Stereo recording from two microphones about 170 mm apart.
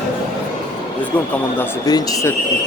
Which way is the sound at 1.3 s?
10° left (ahead or behind).